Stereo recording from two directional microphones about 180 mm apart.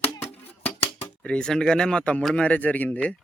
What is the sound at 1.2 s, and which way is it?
Speech, 5° left (ahead or behind).